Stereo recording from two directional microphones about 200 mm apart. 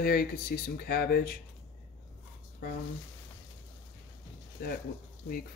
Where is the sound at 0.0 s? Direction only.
50° left (ahead or behind).